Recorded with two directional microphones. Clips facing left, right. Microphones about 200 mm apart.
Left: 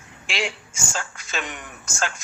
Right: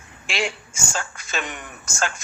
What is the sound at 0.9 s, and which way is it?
Speech, 50° right (ahead or behind).